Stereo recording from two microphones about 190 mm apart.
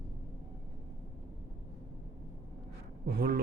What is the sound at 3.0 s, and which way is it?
Mantra, 55° right (ahead or behind).